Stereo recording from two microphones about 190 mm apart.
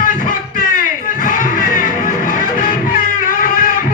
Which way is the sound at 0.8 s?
45° left (ahead or behind).